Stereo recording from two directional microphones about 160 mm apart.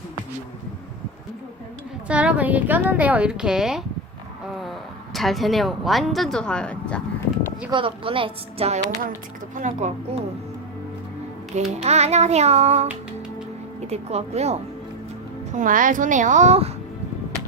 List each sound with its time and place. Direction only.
2.0 s a woman's voice: 5° right (ahead or behind)
7.7 s a woman's voice: 35° right (ahead or behind)
9.6 s child singing: 50° right (ahead or behind)
11.5 s child singing: 40° right (ahead or behind)
13.8 s a woman's voice: 40° right (ahead or behind)
15.5 s child singing: 55° right (ahead or behind)